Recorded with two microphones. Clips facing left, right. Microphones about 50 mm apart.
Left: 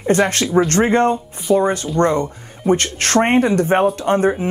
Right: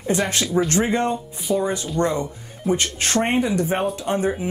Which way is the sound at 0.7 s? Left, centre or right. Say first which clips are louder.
Left 6 dB; left.